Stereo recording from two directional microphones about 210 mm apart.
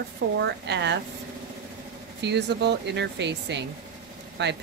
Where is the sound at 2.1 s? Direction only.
55° right (ahead or behind).